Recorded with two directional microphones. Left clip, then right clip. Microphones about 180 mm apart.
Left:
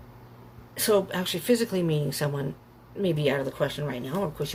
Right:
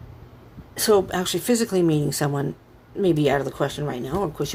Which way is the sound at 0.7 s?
45° right (ahead or behind).